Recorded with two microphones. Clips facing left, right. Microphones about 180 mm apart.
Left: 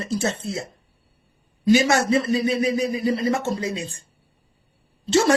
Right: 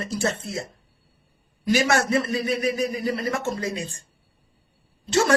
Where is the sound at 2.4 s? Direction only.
30° left (ahead or behind).